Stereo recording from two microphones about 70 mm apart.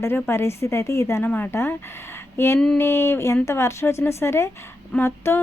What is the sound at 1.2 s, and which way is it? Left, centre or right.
Speech, left.